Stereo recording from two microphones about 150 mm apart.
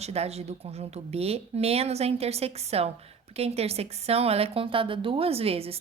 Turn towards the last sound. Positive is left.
turn(degrees=-40)  # may be behind; listen again after turning